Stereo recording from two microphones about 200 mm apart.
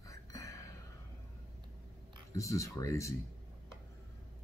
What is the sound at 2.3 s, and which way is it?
Speech, 15° left (ahead or behind).